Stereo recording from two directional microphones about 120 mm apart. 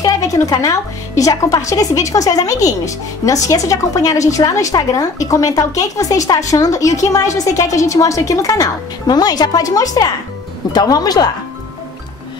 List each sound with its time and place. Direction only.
0.0 s a woman's voice: 30° left (ahead or behind)